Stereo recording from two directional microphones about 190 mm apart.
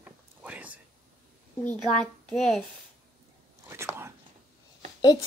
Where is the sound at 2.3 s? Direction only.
Centre (ahead or behind).